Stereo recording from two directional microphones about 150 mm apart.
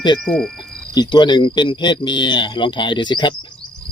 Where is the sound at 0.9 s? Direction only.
30° left (ahead or behind).